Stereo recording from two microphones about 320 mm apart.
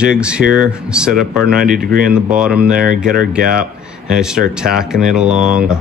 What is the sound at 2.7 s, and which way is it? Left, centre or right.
Speech, right.